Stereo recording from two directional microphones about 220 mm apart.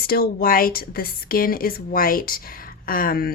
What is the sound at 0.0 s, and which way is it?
Speech, 45° left (ahead or behind).